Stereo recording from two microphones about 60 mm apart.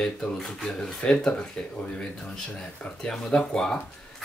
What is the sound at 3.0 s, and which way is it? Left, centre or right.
Speech, centre.